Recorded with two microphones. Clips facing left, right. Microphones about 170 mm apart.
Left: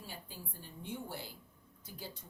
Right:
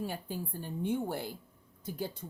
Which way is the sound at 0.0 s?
60° right (ahead or behind).